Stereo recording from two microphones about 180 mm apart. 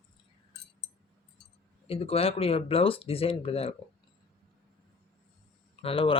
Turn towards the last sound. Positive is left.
turn(degrees=30)  # may be behind; listen again after turning